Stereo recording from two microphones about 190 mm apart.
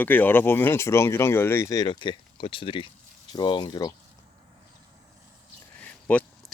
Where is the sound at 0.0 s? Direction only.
10° left (ahead or behind).